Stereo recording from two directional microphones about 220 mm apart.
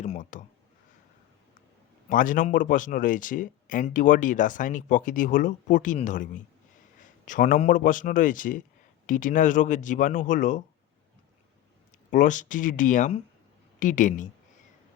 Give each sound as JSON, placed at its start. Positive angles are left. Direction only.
{"t": 0.0, "sound": "a sound", "side_deg": 35}
{"t": 2.0, "sound": "speech", "side_deg": 35}
{"t": 12.1, "sound": "speech", "side_deg": 35}